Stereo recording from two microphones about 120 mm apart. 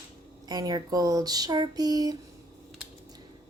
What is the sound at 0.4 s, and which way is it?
Speech, 30° right (ahead or behind).